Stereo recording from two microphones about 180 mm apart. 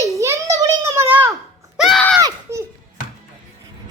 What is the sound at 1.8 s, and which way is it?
Speech, centre (ahead or behind).